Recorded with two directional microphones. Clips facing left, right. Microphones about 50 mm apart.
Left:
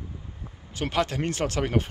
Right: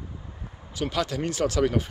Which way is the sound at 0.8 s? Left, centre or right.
Left.